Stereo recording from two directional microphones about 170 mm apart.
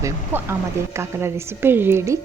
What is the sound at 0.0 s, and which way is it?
Speech, 15° right (ahead or behind).